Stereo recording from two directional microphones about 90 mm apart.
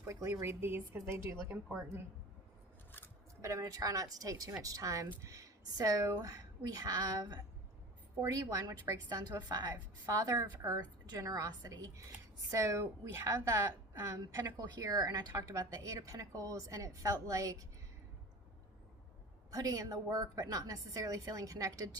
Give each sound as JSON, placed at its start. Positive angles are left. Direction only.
{"t": 0.0, "sound": "a woman's voice", "side_deg": -35}
{"t": 3.4, "sound": "a woman's voice", "side_deg": -40}
{"t": 19.5, "sound": "a woman's voice", "side_deg": -40}